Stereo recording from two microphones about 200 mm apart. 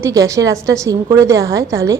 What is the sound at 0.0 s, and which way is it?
A woman's voice, 15° right (ahead or behind).